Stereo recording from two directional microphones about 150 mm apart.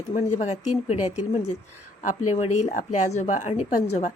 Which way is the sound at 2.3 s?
50° left (ahead or behind).